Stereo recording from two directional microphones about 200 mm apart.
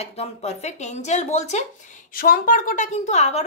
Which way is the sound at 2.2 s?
45° left (ahead or behind).